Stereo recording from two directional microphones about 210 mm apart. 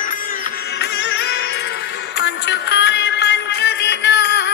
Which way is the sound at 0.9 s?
50° left (ahead or behind).